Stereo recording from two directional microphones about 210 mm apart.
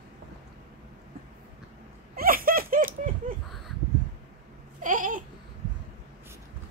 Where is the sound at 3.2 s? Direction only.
40° right (ahead or behind).